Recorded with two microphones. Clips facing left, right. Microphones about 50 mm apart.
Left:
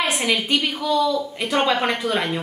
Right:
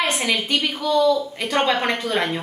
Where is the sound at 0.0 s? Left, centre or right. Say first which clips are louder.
Even; centre.